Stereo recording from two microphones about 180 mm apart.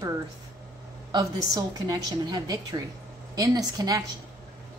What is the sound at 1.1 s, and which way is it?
A woman's voice, 20° right (ahead or behind).